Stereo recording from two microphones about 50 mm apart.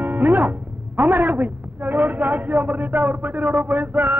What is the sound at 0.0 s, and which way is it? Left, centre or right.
Speech, right.